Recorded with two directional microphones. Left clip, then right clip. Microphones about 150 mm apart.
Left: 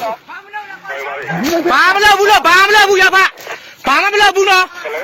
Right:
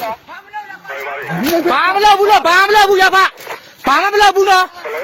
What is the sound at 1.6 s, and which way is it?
Speech, centre (ahead or behind).